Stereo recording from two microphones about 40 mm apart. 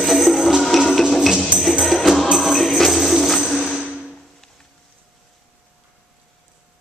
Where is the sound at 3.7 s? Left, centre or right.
Right.